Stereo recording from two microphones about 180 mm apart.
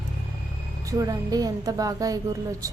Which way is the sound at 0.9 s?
20° right (ahead or behind).